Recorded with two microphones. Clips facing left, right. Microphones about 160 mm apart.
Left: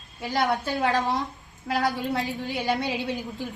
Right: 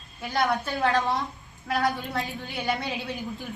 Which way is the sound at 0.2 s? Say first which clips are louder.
Left 1 dB; centre (ahead or behind).